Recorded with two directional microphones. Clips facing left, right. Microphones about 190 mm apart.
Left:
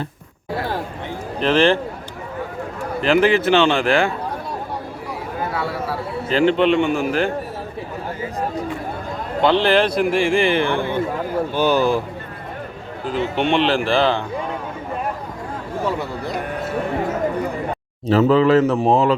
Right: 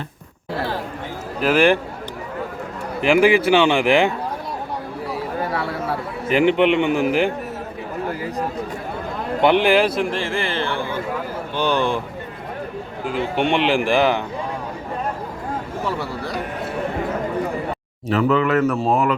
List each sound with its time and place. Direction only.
1.4 s a man's voice: 10° right (ahead or behind)
3.0 s a man's voice: 10° right (ahead or behind)
6.2 s a man's voice: 15° right (ahead or behind)
9.4 s a man's voice: 15° right (ahead or behind)
10.0 s a man's voice: 10° left (ahead or behind)
11.5 s speech: 5° left (ahead or behind)
13.1 s a man's voice: 15° right (ahead or behind)
15.9 s speech: 20° left (ahead or behind)
18.1 s speech: 30° left (ahead or behind)